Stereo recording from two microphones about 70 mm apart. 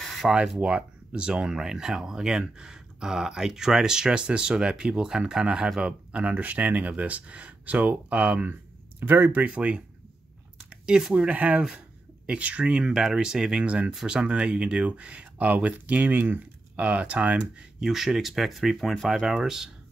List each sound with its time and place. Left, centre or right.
0.0 s a sound: centre
0.3 s speech: centre
9.0 s speech: right
10.9 s speech: centre